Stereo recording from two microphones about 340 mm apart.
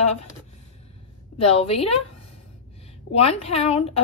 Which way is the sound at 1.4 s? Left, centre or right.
Centre.